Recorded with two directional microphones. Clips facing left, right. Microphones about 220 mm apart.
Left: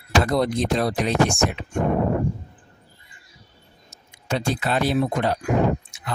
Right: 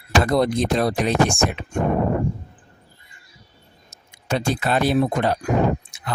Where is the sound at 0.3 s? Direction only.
50° right (ahead or behind).